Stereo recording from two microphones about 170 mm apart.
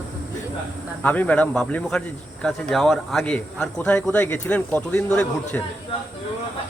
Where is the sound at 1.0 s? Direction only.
10° left (ahead or behind).